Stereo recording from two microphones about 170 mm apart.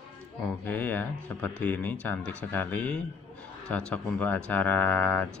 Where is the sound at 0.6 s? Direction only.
10° left (ahead or behind).